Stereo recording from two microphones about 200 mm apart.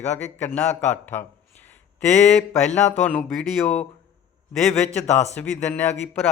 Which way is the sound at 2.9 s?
5° left (ahead or behind).